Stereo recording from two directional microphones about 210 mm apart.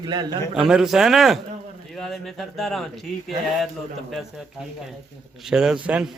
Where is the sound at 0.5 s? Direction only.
Centre (ahead or behind).